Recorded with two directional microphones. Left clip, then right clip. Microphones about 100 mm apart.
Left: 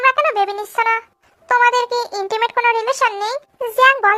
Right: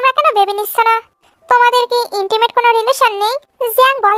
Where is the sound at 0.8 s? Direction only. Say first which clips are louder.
Right 4 dB; 40° right (ahead or behind).